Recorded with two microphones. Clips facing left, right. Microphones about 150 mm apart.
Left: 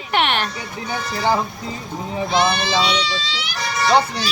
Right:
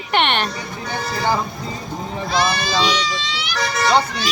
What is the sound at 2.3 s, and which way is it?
Speech, 25° left (ahead or behind).